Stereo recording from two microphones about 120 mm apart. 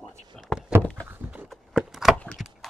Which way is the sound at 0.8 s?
10° left (ahead or behind).